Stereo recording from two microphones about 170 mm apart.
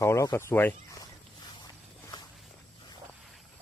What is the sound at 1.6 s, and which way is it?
Walk, 25° left (ahead or behind).